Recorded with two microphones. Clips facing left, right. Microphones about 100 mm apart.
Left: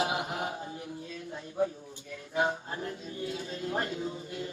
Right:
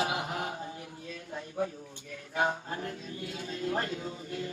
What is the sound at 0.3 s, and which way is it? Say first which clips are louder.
Mantra: left 1 dB; 30° left (ahead or behind).